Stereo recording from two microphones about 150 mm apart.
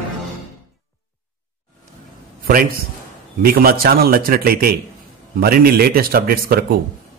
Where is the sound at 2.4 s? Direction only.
75° right (ahead or behind).